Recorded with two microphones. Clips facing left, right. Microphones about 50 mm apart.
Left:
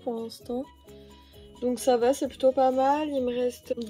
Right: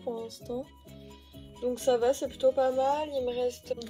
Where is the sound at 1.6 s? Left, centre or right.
Left.